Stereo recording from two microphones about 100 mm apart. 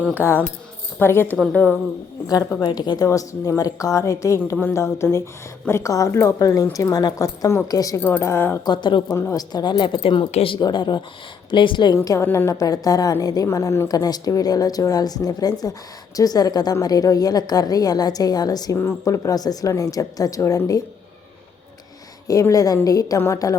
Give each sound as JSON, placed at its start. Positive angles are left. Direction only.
{"t": 0.1, "sound": "a woman's voice", "side_deg": 20}
{"t": 2.6, "sound": "speech", "side_deg": 45}
{"t": 3.1, "sound": "a woman's voice", "side_deg": 30}
{"t": 8.2, "sound": "a woman's voice", "side_deg": 25}
{"t": 8.6, "sound": "speech", "side_deg": 50}
{"t": 9.0, "sound": "a woman's voice", "side_deg": 30}
{"t": 9.4, "sound": "a woman's voice", "side_deg": 45}
{"t": 10.6, "sound": "speech", "side_deg": 50}
{"t": 11.9, "sound": "a woman's voice", "side_deg": 30}
{"t": 13.8, "sound": "a woman's voice", "side_deg": 40}
{"t": 18.8, "sound": "a woman's voice", "side_deg": 30}
{"t": 22.3, "sound": "a woman's voice", "side_deg": 35}